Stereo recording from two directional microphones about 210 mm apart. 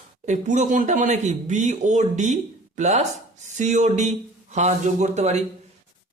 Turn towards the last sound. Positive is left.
turn(degrees=-35)  # may be behind; listen again after turning